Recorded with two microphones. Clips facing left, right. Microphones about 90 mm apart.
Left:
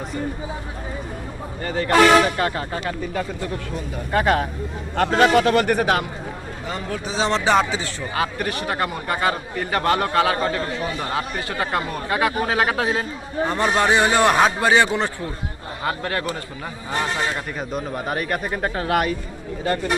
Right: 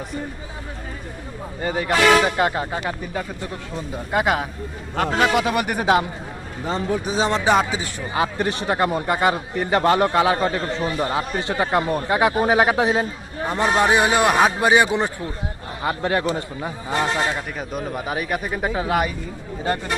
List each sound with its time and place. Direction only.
1.6 s a man's voice: 15° right (ahead or behind)
7.0 s a man's voice: 15° right (ahead or behind)
17.3 s speech: centre (ahead or behind)